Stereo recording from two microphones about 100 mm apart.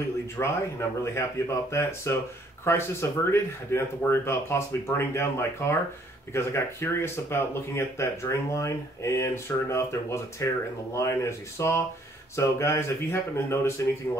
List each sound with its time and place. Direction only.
0.4 s speech: 30° left (ahead or behind)